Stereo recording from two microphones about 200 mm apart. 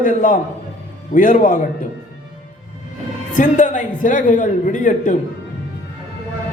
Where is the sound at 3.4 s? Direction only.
40° left (ahead or behind).